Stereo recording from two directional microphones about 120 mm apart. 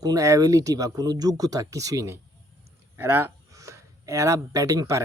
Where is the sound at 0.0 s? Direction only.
30° right (ahead or behind).